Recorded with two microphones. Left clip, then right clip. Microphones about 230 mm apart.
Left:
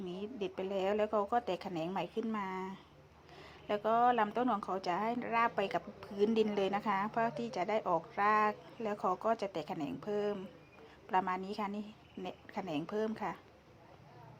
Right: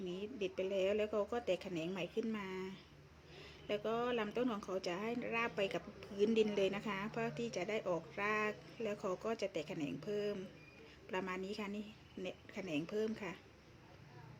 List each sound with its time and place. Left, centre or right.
0.1 s a sound: centre
0.8 s a woman's voice: centre
9.7 s a woman's voice: left
11.1 s a woman's voice: centre